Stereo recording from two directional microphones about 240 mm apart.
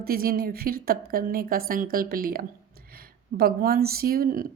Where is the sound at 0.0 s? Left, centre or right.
Right.